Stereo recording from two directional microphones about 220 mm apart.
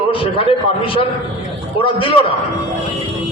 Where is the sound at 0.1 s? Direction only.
25° left (ahead or behind).